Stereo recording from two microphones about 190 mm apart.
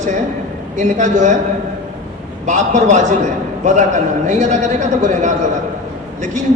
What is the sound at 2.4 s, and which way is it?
Speech, 40° right (ahead or behind).